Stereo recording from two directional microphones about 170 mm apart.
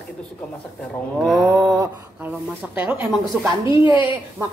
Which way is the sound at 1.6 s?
20° right (ahead or behind).